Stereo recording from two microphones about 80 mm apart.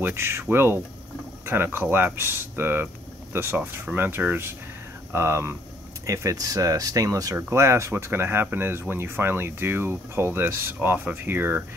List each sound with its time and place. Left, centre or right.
0.1 s speech: right
7.3 s speech: right